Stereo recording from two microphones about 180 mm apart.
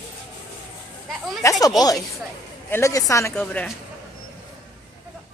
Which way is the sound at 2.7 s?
15° left (ahead or behind).